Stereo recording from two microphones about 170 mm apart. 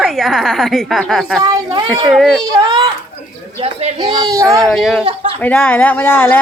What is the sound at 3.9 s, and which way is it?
Speech, 25° right (ahead or behind).